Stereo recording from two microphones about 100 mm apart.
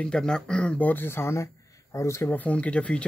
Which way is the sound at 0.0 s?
10° left (ahead or behind).